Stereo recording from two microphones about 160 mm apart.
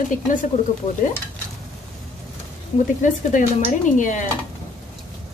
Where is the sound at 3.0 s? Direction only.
50° left (ahead or behind).